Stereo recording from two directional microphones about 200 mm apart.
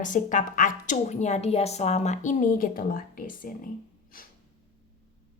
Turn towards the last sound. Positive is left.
turn(degrees=45)  # may be behind; listen again after turning